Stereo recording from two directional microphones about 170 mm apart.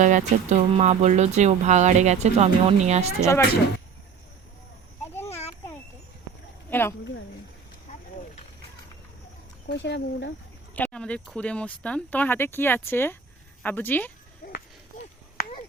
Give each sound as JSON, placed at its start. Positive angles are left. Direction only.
{"t": 0.0, "sound": "speech", "side_deg": -45}
{"t": 3.2, "sound": "speech", "side_deg": 15}
{"t": 5.1, "sound": "a sound", "side_deg": 15}
{"t": 6.7, "sound": "speech", "side_deg": 15}
{"t": 9.6, "sound": "speech", "side_deg": 90}
{"t": 10.8, "sound": "speech", "side_deg": 10}
{"t": 15.4, "sound": "a sound", "side_deg": 60}